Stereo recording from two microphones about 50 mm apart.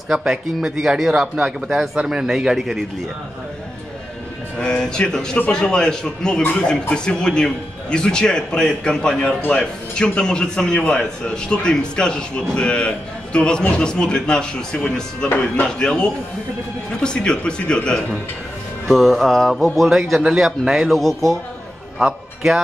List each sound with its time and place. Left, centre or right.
0.1 s speech: centre
2.0 s speech: centre
4.6 s a man's voice: centre
18.9 s speech: centre